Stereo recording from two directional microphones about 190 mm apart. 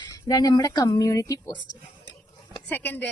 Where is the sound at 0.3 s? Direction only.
20° left (ahead or behind).